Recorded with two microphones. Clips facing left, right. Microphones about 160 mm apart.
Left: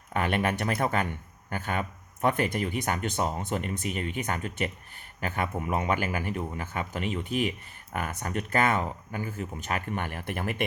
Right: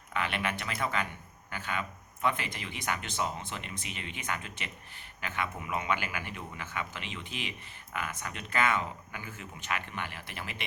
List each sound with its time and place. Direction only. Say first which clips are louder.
0.1 s speech: left 6 dB; 45° left (ahead or behind)